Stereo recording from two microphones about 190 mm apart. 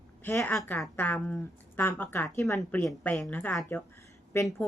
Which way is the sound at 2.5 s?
5° left (ahead or behind).